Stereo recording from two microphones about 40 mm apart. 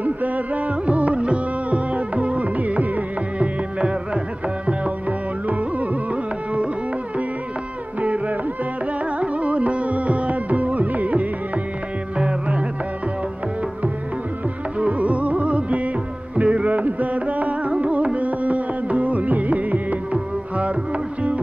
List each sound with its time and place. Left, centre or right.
0.0 s music: right
8.0 s music: right
12.2 s music: right
14.8 s music: right